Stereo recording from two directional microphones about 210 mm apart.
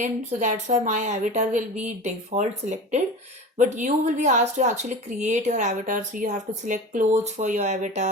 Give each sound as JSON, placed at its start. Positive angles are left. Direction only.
{"t": 0.0, "sound": "a woman's voice", "side_deg": -35}